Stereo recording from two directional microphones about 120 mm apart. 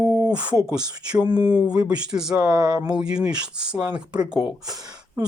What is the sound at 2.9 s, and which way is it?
Speech, 5° right (ahead or behind).